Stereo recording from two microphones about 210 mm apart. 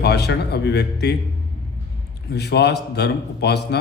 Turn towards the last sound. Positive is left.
turn(degrees=50)  # may be behind; listen again after turning